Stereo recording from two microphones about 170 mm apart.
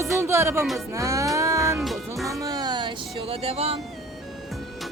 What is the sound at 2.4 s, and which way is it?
Music, 25° right (ahead or behind).